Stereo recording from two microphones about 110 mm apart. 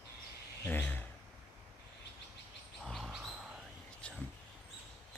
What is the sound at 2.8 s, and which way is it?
Chirp, centre (ahead or behind).